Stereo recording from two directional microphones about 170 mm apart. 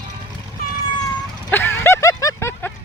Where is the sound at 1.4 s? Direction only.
10° left (ahead or behind).